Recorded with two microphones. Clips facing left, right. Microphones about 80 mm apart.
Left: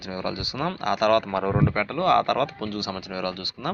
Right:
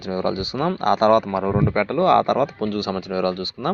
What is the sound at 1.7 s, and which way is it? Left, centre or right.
Speech, right.